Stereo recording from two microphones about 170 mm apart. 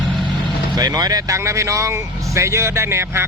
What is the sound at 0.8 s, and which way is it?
Speech, 20° right (ahead or behind).